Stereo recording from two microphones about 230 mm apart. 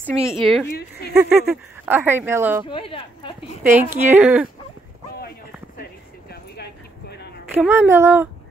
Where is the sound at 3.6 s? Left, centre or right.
Centre.